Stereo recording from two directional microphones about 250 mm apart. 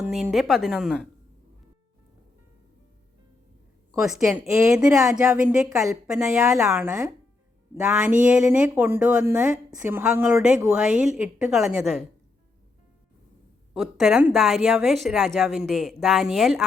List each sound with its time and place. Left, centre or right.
0.0 s speech: centre
3.9 s a woman's voice: centre
8.2 s speech: centre
13.7 s speech: centre